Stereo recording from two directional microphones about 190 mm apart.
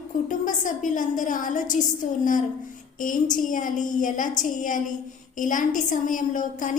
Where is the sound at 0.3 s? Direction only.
45° left (ahead or behind).